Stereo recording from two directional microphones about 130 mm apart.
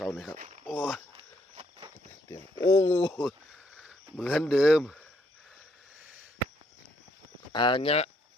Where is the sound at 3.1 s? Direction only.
Centre (ahead or behind).